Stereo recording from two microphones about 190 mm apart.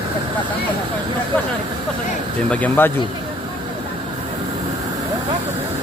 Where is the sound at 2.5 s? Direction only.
10° left (ahead or behind).